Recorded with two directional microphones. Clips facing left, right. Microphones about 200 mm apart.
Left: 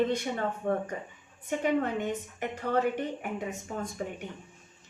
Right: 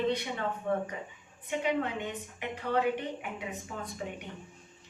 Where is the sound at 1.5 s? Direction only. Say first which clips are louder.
Left 3 dB; 45° left (ahead or behind).